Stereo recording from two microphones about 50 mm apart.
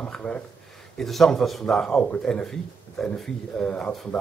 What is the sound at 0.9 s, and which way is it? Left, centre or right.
Speech, centre.